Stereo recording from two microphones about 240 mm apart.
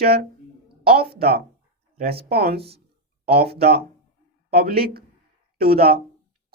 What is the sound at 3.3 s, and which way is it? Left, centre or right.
Speech, right.